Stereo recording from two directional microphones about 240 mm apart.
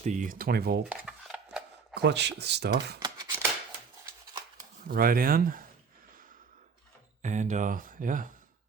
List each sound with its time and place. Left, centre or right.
0.0 s speech: right
0.9 s cutlery: centre
2.0 s speech: right
3.0 s shuffling cards: centre
4.9 s speech: right
7.2 s speech: right